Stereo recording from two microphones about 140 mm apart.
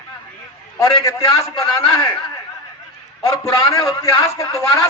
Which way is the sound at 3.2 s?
25° left (ahead or behind).